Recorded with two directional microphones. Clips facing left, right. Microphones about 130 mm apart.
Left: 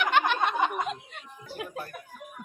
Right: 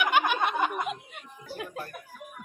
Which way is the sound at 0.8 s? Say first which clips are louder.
Left 1 dB; 5° right (ahead or behind).